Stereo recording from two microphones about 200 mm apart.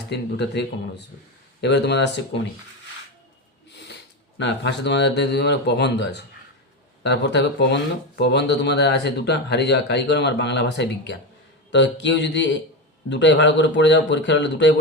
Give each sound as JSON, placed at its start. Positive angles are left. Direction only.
{"t": 0.1, "sound": "speech", "side_deg": 60}
{"t": 3.7, "sound": "a sound", "side_deg": 55}
{"t": 4.4, "sound": "speech", "side_deg": 60}